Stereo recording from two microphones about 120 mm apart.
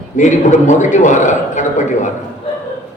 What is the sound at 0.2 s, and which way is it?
A man's voice, 90° left.